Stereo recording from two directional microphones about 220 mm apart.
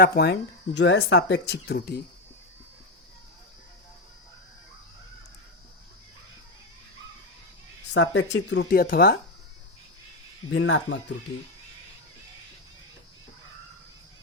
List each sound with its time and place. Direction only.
0.0 s speech: 50° left (ahead or behind)
7.9 s speech: 55° left (ahead or behind)
10.5 s speech: 60° left (ahead or behind)